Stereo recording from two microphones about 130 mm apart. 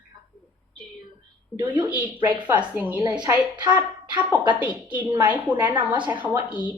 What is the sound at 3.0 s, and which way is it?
Speech, 25° right (ahead or behind).